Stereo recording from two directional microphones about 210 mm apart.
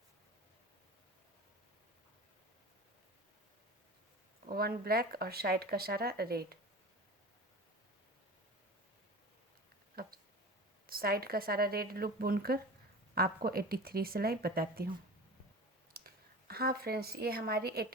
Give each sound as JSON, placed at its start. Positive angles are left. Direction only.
{"t": 4.4, "sound": "speech", "side_deg": -45}
{"t": 9.9, "sound": "a sound", "side_deg": -45}
{"t": 10.8, "sound": "speech", "side_deg": -45}
{"t": 15.9, "sound": "speech", "side_deg": -45}